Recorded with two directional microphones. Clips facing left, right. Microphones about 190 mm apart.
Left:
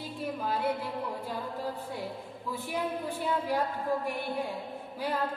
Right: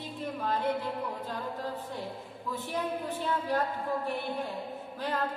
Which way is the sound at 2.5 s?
10° left (ahead or behind).